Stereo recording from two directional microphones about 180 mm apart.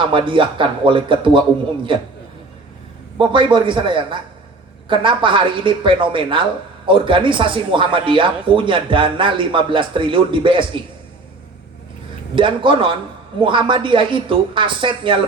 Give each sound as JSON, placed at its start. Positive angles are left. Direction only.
{"t": 0.0, "sound": "speech", "side_deg": -30}
{"t": 3.2, "sound": "speech", "side_deg": -25}
{"t": 12.4, "sound": "speech", "side_deg": -30}